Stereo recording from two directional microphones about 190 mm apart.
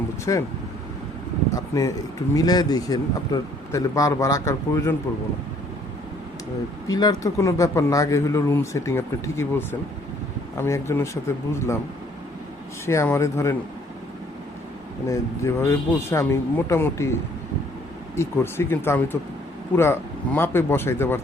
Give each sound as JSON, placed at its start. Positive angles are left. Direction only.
{"t": 0.3, "sound": "speech", "side_deg": 20}
{"t": 1.5, "sound": "speech", "side_deg": 15}
{"t": 6.8, "sound": "speech", "side_deg": 20}
{"t": 12.8, "sound": "speech", "side_deg": 15}
{"t": 15.0, "sound": "speech", "side_deg": 15}
{"t": 18.2, "sound": "speech", "side_deg": 15}